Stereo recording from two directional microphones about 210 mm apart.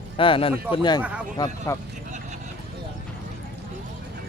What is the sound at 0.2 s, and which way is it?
Speech, 25° left (ahead or behind).